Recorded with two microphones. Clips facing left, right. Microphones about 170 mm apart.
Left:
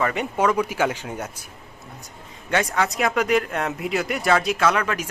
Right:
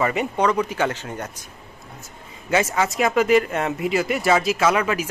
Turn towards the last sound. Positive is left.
turn(degrees=-5)  # may be behind; listen again after turning